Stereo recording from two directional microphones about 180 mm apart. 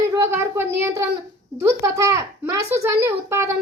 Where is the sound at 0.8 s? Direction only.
15° right (ahead or behind).